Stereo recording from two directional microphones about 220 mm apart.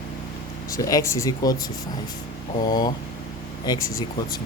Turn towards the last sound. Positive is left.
turn(degrees=20)  # may be behind; listen again after turning